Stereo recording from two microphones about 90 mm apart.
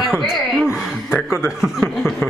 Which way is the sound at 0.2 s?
5° right (ahead or behind).